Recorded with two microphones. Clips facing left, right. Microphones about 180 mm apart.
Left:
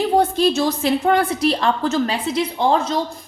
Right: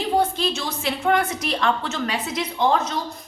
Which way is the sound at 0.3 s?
35° left (ahead or behind).